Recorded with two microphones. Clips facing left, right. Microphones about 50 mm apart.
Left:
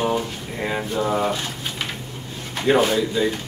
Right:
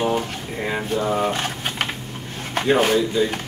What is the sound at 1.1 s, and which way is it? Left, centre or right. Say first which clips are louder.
Speech: even; right.